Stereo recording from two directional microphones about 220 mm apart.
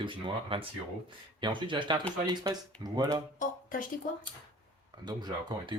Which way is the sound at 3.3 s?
40° left (ahead or behind).